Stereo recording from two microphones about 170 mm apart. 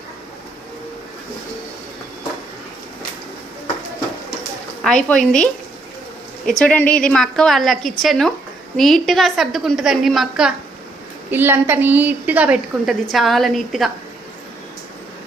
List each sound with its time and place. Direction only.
4.8 s a woman's voice: 5° left (ahead or behind)
6.6 s a woman's voice: 10° left (ahead or behind)